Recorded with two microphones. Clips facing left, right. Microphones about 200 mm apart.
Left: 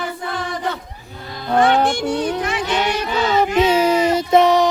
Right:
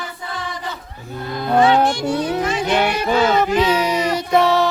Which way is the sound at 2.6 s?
55° right (ahead or behind).